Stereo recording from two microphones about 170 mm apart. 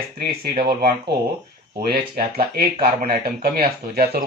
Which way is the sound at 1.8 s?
60° right (ahead or behind).